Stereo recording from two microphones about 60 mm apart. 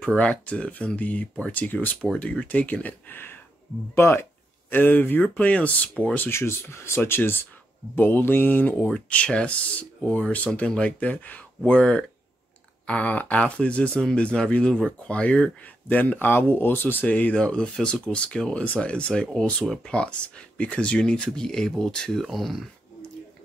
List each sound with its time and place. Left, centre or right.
0.0 s speech: centre
3.9 s speech: left
6.3 s speech: left
8.9 s speech: centre
22.2 s speech: centre